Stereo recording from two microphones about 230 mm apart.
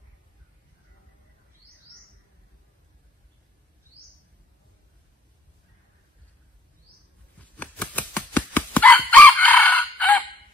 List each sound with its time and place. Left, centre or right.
7.3 s chicken: centre
9.1 s crowing: centre